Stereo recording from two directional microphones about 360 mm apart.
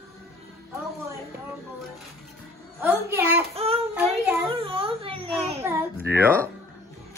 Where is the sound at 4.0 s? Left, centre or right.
Centre.